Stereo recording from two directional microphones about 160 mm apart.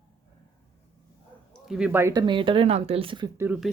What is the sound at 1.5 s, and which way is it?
Speech, centre (ahead or behind).